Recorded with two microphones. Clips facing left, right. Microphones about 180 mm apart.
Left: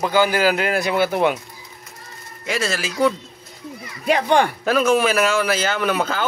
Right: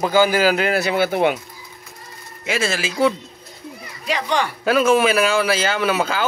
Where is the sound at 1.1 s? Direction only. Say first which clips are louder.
Right 1 dB; 55° right (ahead or behind).